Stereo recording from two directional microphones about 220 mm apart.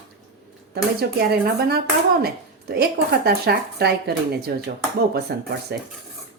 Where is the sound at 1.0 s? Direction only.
45° right (ahead or behind).